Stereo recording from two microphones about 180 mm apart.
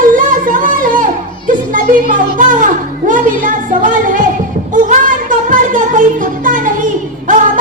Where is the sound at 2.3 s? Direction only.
45° right (ahead or behind).